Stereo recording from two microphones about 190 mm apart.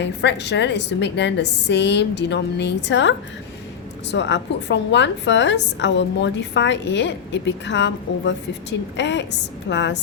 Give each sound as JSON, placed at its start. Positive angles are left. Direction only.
{"t": 0.0, "sound": "a woman's voice", "side_deg": 65}